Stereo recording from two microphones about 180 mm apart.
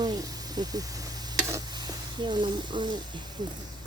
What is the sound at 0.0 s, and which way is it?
Sizzle, 20° right (ahead or behind).